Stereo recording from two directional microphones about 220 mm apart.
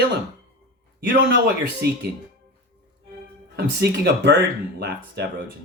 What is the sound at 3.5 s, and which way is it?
Speech, 50° right (ahead or behind).